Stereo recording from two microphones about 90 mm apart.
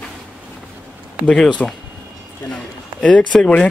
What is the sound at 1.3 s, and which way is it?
A man's voice, 10° left (ahead or behind).